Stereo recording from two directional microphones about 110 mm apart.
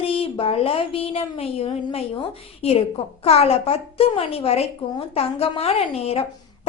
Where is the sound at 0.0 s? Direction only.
55° left (ahead or behind).